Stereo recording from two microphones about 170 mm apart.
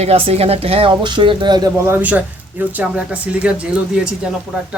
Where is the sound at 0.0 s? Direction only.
40° right (ahead or behind); by 4.3 s 5° right (ahead or behind).